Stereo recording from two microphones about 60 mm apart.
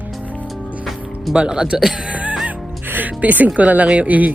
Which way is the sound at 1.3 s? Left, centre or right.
Centre.